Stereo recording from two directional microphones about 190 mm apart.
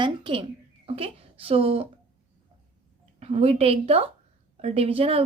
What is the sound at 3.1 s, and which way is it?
Speech, 35° right (ahead or behind).